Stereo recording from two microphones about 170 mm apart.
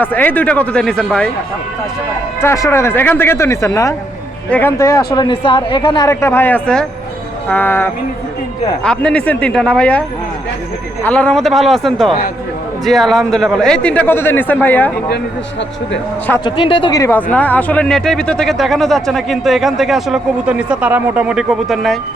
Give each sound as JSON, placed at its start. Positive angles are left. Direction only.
{"t": 0.0, "sound": "speech", "side_deg": 10}
{"t": 2.4, "sound": "speech", "side_deg": 15}
{"t": 11.0, "sound": "speech", "side_deg": 5}
{"t": 16.4, "sound": "speech", "side_deg": 30}
{"t": 17.0, "sound": "speech", "side_deg": 10}